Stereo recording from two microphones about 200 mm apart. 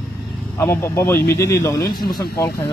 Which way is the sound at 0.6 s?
10° left (ahead or behind).